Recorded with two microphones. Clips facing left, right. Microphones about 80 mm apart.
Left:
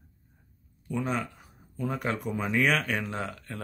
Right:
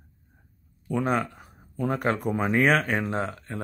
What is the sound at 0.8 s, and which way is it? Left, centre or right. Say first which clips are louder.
Speech: right 5 dB; right.